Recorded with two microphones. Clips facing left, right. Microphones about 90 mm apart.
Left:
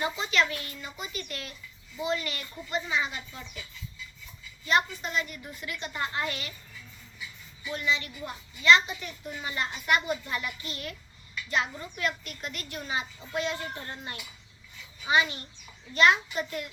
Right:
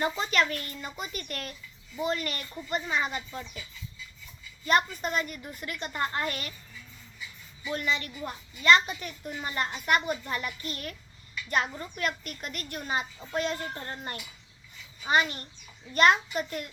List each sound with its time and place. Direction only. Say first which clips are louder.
0.0 s speech: right 1 dB; 45° right (ahead or behind)
5.0 s speech: right 2 dB; 45° right (ahead or behind)
7.7 s speech: even; 45° right (ahead or behind)